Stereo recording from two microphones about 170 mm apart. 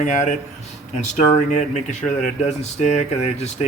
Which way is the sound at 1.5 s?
45° left (ahead or behind).